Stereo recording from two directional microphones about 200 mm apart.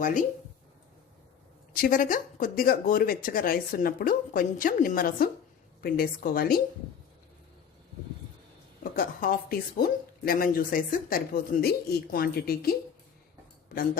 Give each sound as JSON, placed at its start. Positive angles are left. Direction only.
{"t": 0.0, "sound": "speech", "side_deg": 40}
{"t": 1.7, "sound": "speech", "side_deg": 45}
{"t": 8.8, "sound": "speech", "side_deg": 45}